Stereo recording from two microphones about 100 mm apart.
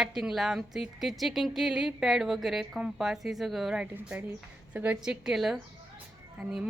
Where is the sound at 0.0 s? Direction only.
5° right (ahead or behind).